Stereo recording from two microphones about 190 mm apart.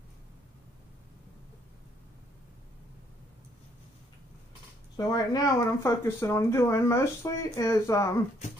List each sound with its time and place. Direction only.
4.9 s speech: 20° left (ahead or behind)